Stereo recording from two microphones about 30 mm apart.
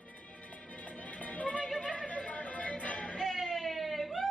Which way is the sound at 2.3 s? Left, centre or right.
Left.